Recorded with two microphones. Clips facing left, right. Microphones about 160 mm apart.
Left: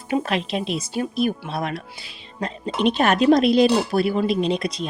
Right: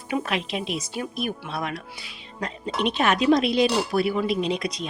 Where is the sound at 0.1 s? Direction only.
35° left (ahead or behind).